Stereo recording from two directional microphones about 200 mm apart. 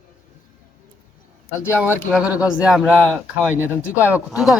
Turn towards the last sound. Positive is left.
turn(degrees=-5)  # may be behind; listen again after turning